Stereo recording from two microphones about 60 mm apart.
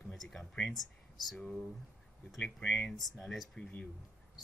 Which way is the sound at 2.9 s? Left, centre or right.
Centre.